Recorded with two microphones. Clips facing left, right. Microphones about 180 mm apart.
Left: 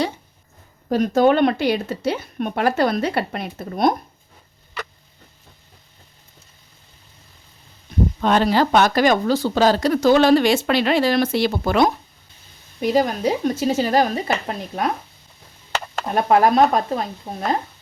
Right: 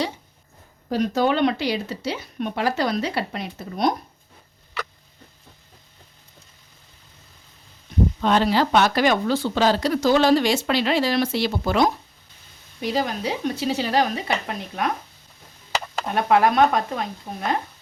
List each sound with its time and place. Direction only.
0.9 s a woman's voice: 50° left (ahead or behind)
8.2 s a woman's voice: 50° left (ahead or behind)
16.1 s speech: 40° left (ahead or behind)